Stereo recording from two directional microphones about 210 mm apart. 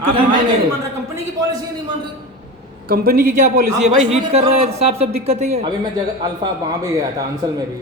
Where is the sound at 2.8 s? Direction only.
45° right (ahead or behind).